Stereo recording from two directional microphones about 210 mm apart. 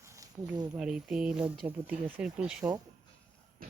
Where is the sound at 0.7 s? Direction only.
5° right (ahead or behind).